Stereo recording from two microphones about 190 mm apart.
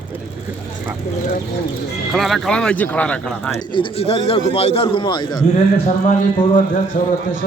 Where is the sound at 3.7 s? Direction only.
30° left (ahead or behind).